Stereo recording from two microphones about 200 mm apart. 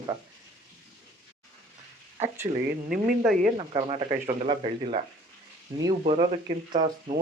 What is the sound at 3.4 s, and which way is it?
Speech, 25° right (ahead or behind).